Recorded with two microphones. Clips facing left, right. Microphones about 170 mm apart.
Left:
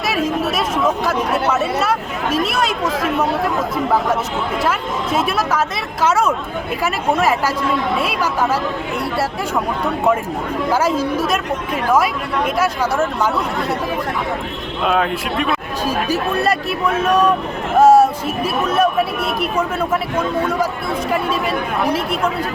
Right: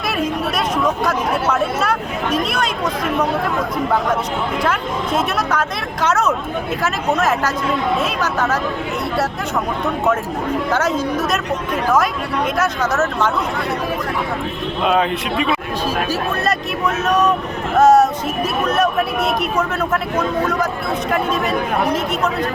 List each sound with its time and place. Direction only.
1.0 s speech: 5° left (ahead or behind)
4.6 s speech: 5° left (ahead or behind)
10.7 s speech: 10° left (ahead or behind)
14.8 s speech: centre (ahead or behind)
16.0 s speech: 15° left (ahead or behind)